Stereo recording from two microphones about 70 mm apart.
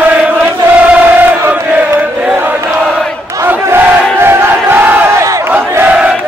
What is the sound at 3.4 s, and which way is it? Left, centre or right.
Battle cry, right.